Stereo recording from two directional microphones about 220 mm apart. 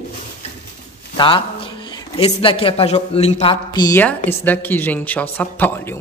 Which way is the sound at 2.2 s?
25° left (ahead or behind).